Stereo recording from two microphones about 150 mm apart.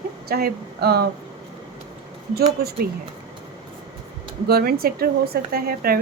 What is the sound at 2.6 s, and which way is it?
Speech, 90° right.